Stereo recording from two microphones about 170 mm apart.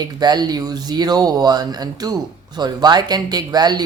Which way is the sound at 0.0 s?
25° right (ahead or behind).